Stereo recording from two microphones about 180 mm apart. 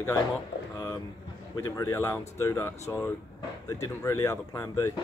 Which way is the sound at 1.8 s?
15° left (ahead or behind).